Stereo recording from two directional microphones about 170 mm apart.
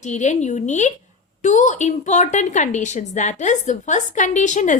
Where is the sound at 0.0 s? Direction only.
45° left (ahead or behind).